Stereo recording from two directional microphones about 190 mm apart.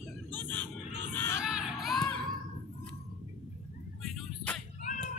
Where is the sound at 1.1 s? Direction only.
10° left (ahead or behind).